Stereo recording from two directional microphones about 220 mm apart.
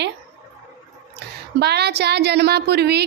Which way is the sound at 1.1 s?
50° right (ahead or behind).